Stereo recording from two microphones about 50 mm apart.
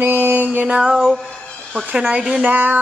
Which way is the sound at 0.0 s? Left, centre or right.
Right.